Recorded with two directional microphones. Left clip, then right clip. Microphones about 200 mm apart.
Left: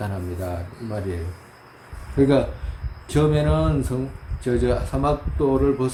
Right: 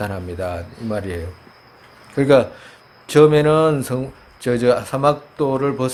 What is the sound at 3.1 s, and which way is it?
Speech, 35° right (ahead or behind).